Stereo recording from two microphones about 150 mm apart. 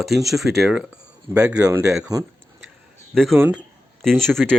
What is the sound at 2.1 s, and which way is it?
Speech, 25° right (ahead or behind).